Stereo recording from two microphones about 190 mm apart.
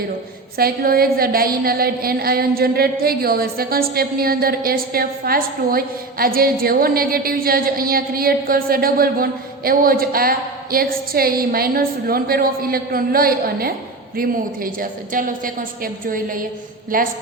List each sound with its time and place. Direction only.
0.5 s a woman's voice: 50° right (ahead or behind)